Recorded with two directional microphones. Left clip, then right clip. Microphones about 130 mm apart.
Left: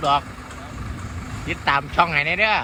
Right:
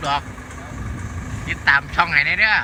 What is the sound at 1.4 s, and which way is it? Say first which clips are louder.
Speech: right 4 dB; 10° left (ahead or behind).